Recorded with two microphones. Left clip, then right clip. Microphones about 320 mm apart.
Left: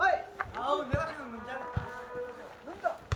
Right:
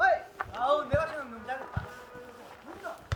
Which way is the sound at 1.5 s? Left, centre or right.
Centre.